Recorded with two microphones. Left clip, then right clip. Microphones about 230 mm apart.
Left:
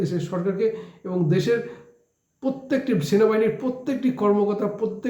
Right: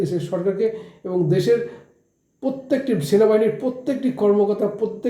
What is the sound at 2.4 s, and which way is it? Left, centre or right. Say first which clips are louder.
Speech: right 3 dB; centre.